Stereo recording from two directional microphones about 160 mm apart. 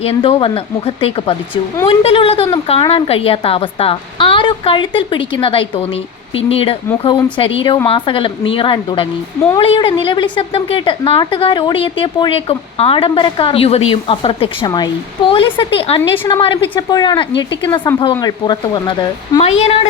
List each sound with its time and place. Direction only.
0.0 s speech: 35° left (ahead or behind)
19.4 s speech: 40° left (ahead or behind)